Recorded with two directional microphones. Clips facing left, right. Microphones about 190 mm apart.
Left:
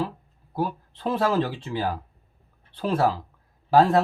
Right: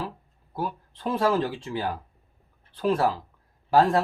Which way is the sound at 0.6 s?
30° left (ahead or behind).